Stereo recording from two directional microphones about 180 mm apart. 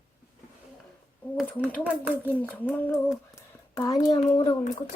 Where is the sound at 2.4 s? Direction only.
10° left (ahead or behind).